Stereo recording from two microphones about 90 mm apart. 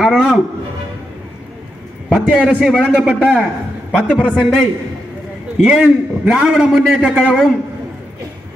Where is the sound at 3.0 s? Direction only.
10° left (ahead or behind).